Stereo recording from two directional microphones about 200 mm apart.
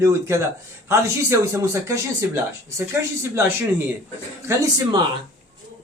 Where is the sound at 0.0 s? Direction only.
15° right (ahead or behind).